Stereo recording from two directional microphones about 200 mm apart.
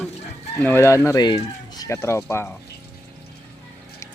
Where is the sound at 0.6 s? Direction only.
10° left (ahead or behind).